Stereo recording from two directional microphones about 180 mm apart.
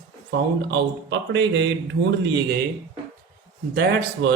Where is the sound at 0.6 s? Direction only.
80° right.